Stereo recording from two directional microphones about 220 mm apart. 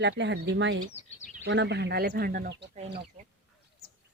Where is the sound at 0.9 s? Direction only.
30° left (ahead or behind).